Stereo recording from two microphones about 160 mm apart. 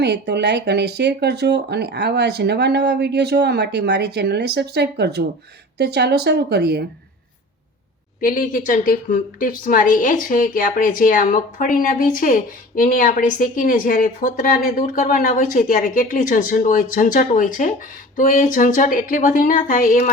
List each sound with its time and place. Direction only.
0.0 s speech: 90° right
8.2 s a woman's voice: 60° left (ahead or behind)